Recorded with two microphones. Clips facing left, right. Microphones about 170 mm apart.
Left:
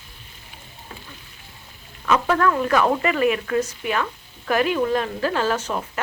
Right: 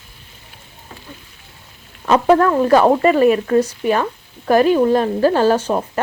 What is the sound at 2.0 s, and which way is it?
A woman's voice, 35° right (ahead or behind).